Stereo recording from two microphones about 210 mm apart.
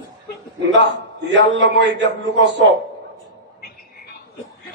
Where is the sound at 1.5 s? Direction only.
60° right (ahead or behind).